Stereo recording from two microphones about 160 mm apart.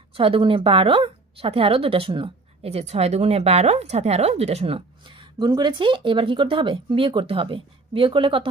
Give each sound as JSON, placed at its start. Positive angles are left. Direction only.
{"t": 0.1, "sound": "speech", "side_deg": -35}